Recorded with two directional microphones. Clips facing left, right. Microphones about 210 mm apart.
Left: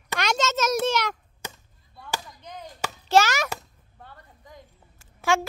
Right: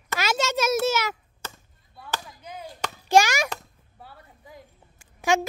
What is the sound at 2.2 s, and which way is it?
Chop, 5° right (ahead or behind).